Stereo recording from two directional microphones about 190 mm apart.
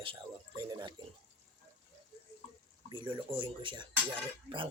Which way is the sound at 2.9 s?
25° right (ahead or behind).